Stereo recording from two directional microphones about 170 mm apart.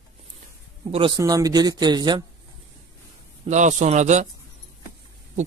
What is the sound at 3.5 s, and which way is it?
Speech, 45° right (ahead or behind).